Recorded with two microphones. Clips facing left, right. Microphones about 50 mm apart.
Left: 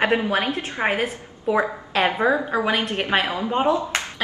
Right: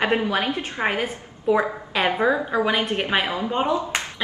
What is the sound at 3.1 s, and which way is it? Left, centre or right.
Speech, centre.